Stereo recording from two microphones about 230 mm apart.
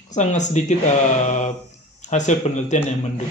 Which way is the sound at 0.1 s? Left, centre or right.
Left.